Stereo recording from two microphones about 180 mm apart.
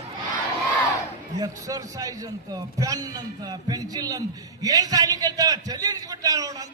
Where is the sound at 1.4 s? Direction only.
20° right (ahead or behind).